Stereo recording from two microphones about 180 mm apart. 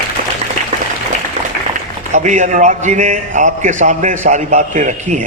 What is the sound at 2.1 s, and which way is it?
A man's voice, 45° right (ahead or behind).